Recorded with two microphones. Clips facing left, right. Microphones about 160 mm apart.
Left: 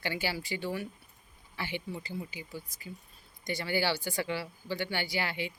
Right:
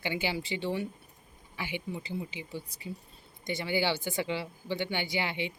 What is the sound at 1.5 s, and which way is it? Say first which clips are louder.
A woman's voice: right 1 dB; 15° right (ahead or behind).